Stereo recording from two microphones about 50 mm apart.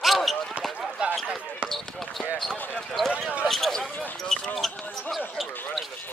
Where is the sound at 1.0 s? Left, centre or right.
Right.